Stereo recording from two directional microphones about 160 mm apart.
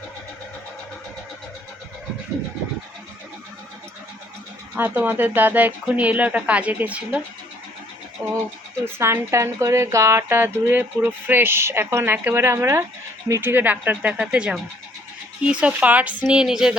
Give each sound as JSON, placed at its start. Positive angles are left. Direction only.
{"t": 4.7, "sound": "speech", "side_deg": -10}
{"t": 8.2, "sound": "speech", "side_deg": -15}
{"t": 16.3, "sound": "music", "side_deg": -5}